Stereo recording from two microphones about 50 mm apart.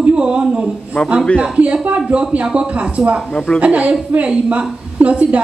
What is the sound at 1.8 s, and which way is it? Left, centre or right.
A woman's voice, right.